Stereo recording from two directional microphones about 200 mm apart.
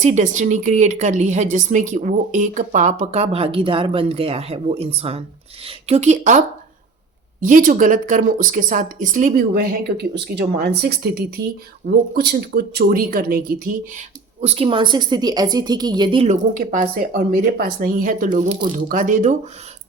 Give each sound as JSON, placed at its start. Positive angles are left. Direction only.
{"t": 0.0, "sound": "speech", "side_deg": -35}
{"t": 7.4, "sound": "speech", "side_deg": -40}
{"t": 14.4, "sound": "a woman's voice", "side_deg": -30}